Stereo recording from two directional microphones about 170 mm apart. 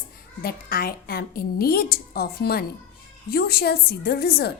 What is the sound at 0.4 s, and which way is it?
A woman's voice, 65° left (ahead or behind).